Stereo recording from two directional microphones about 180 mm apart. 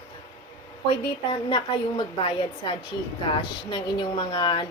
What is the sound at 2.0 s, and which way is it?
A woman's voice, 30° left (ahead or behind).